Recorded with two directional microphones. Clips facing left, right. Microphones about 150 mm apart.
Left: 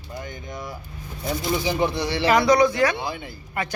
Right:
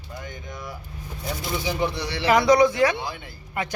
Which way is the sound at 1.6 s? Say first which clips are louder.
Left 1 dB; 35° left (ahead or behind).